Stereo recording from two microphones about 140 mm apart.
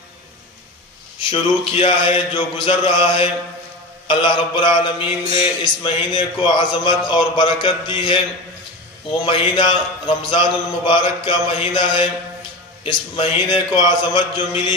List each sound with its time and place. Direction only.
1.3 s speech: 40° left (ahead or behind)
9.2 s speech: 40° left (ahead or behind)